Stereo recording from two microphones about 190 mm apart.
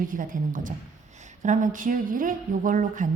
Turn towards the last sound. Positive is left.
turn(degrees=-45)  # may be behind; listen again after turning